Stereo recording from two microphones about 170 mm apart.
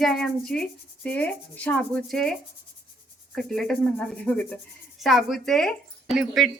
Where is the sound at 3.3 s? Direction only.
5° left (ahead or behind).